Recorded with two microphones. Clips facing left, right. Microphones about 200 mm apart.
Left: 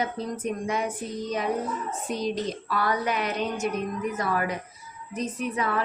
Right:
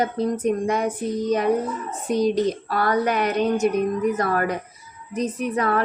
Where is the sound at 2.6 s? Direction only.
60° right (ahead or behind).